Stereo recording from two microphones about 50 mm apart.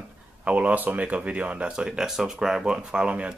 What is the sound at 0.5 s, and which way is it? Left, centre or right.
Speech, right.